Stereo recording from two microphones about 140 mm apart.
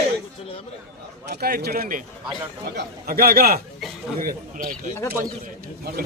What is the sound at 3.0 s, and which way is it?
A man's voice, 90° right.